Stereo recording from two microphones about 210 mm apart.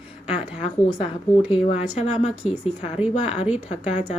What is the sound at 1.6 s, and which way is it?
A woman's voice, 35° left (ahead or behind).